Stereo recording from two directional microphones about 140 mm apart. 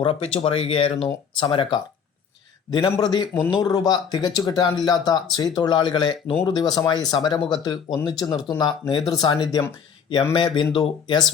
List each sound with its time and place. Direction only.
0.0 s a man's voice: 40° left (ahead or behind)